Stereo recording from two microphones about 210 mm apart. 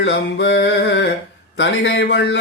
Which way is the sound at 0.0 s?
60° left (ahead or behind).